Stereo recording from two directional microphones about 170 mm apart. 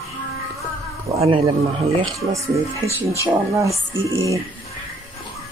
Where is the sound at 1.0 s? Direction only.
35° right (ahead or behind).